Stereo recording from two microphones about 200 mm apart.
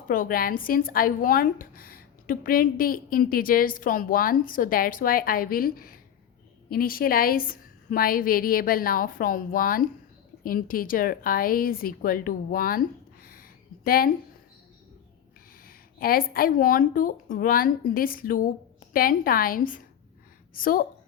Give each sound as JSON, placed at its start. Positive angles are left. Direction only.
{"t": 0.1, "sound": "speech", "side_deg": 45}
{"t": 13.2, "sound": "a sound", "side_deg": 50}
{"t": 15.6, "sound": "speech", "side_deg": 45}